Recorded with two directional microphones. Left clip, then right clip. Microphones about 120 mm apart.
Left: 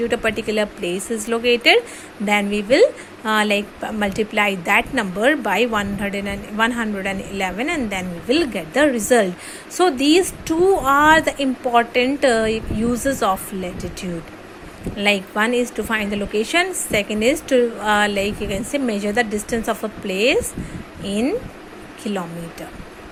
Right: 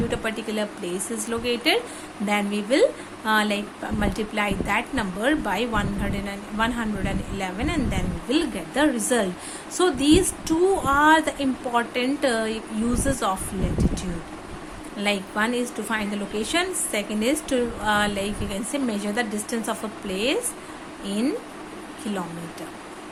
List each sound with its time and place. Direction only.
0.1 s a woman's voice: 35° left (ahead or behind)